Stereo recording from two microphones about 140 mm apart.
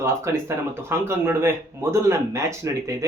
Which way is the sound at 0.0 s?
20° right (ahead or behind).